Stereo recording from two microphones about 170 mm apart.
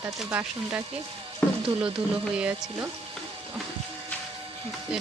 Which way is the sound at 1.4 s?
5° left (ahead or behind).